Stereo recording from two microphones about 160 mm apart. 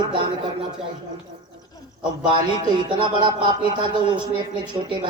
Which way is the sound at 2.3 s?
30° right (ahead or behind).